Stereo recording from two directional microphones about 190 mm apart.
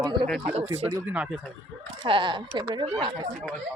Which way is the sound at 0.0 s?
25° right (ahead or behind).